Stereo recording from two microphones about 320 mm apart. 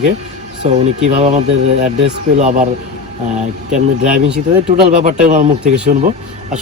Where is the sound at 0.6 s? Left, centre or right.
Centre.